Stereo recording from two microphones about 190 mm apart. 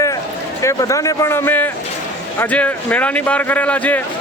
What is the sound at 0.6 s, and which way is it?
Speech, 15° left (ahead or behind).